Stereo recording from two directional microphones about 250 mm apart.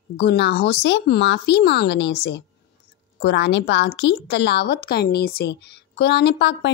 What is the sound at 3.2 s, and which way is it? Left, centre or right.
A woman's voice, left.